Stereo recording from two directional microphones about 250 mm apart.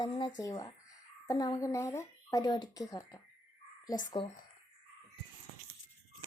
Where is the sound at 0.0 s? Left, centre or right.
Centre.